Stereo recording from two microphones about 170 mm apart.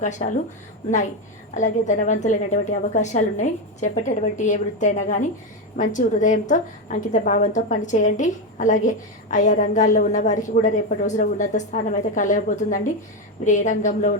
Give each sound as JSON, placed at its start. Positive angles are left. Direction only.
{"t": 0.0, "sound": "a woman's voice", "side_deg": 45}
{"t": 1.5, "sound": "a woman's voice", "side_deg": 45}